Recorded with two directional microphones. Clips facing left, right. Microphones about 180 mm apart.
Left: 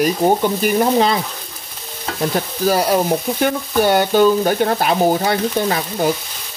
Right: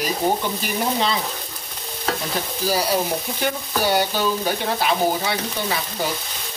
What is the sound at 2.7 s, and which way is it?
Frying, 55° left (ahead or behind).